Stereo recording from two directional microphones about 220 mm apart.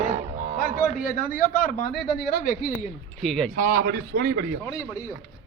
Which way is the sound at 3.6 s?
45° right (ahead or behind).